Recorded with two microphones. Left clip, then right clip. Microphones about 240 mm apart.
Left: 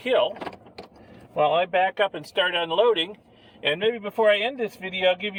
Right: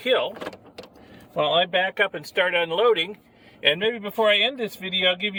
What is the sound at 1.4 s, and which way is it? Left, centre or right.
Speech, right.